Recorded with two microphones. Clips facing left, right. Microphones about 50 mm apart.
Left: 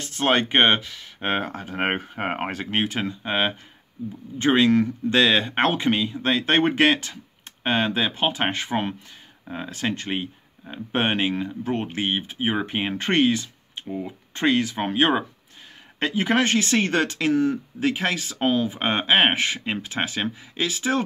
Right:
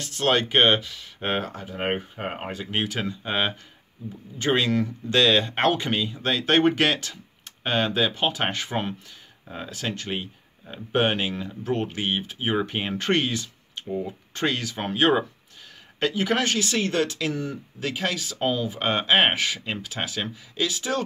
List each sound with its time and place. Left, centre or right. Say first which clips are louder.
0.0 s speech: left 1 dB; left
0.7 s speech: right 1 dB; centre
1.7 s speech: left 3 dB; left
2.7 s speech: left 1 dB; left
4.5 s speech: left 4 dB; centre
13.8 s speech: right 2 dB; centre
14.3 s speech: left 6 dB; left